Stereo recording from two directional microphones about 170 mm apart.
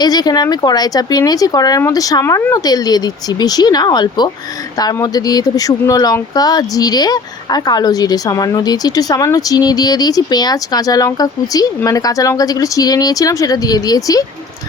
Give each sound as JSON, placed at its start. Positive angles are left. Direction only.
{"t": 0.0, "sound": "speech", "side_deg": 25}